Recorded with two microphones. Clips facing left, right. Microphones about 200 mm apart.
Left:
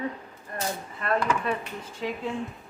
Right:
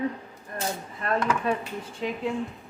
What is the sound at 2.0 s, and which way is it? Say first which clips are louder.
Speech: right 1 dB; 20° right (ahead or behind).